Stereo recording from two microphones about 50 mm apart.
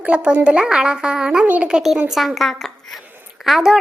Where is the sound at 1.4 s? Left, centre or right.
Right.